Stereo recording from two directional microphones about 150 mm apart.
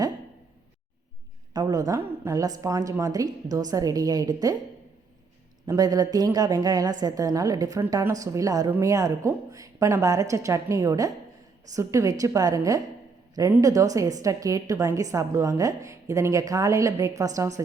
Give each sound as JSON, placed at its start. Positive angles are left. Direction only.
{"t": 1.5, "sound": "a woman's voice", "side_deg": -25}
{"t": 5.6, "sound": "a woman's voice", "side_deg": -25}